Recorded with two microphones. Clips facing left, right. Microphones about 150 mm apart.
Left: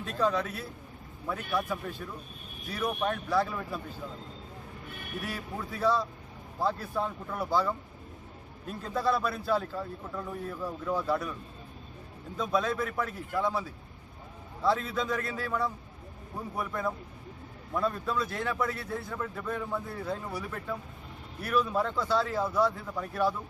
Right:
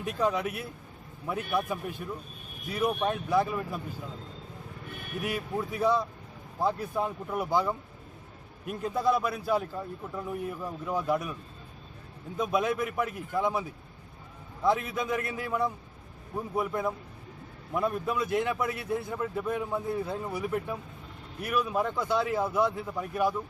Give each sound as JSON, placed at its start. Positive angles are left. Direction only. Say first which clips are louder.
{"t": 0.0, "sound": "a man's voice", "louder": "right 1 dB", "side_deg": -15}
{"t": 5.2, "sound": "a man's voice", "louder": "right 7 dB", "side_deg": -15}
{"t": 12.4, "sound": "a man's voice", "louder": "right 1 dB", "side_deg": -15}